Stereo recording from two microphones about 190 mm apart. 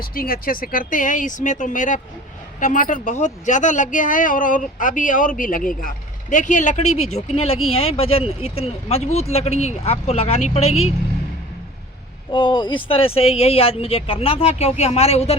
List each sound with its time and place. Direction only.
0.0 s a woman's voice: 50° left (ahead or behind); by 10.9 s 35° left (ahead or behind)
12.3 s speech: 25° left (ahead or behind)